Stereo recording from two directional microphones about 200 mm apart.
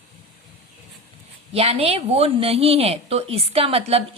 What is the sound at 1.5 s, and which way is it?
A woman's voice, 30° right (ahead or behind).